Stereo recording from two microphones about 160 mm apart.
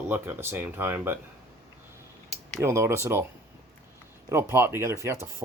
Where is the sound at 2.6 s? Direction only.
15° right (ahead or behind).